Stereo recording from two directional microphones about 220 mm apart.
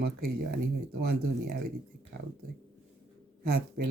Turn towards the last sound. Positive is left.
turn(degrees=-45)  # may be behind; listen again after turning